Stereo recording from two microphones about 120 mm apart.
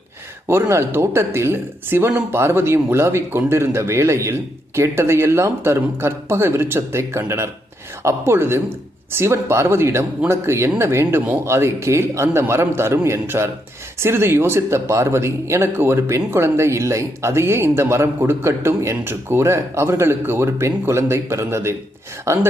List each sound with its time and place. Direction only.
0.4 s speech: 20° right (ahead or behind)